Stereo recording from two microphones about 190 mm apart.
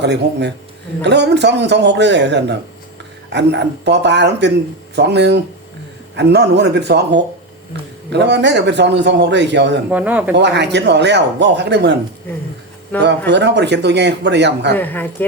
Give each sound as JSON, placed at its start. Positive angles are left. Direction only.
{"t": 0.0, "sound": "speech", "side_deg": -65}
{"t": 9.9, "sound": "speech", "side_deg": -5}
{"t": 10.3, "sound": "speech", "side_deg": -65}
{"t": 13.0, "sound": "speech", "side_deg": -65}
{"t": 14.7, "sound": "speech", "side_deg": 10}